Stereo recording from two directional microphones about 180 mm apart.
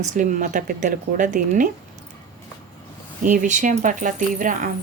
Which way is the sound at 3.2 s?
45° right (ahead or behind).